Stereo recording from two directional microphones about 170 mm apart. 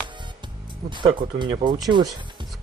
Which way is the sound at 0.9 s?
30° right (ahead or behind).